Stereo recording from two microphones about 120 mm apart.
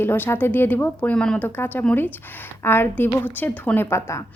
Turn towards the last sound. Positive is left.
turn(degrees=20)  # may be behind; listen again after turning